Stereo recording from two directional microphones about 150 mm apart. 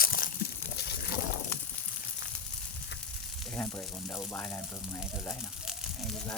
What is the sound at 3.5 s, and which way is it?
Sizzle, 15° left (ahead or behind).